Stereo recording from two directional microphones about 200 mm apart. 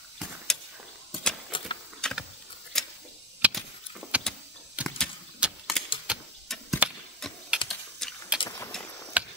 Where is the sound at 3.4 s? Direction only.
5° right (ahead or behind).